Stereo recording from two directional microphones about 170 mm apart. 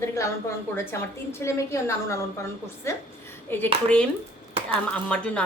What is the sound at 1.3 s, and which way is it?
Speech, 15° left (ahead or behind).